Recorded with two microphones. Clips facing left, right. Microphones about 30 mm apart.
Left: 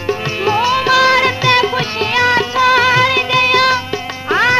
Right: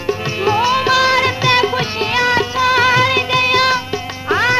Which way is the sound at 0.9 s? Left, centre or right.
Left.